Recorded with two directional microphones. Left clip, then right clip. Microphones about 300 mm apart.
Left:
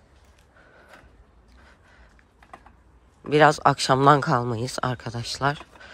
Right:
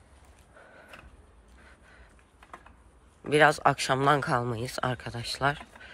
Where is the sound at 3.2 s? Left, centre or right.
Centre.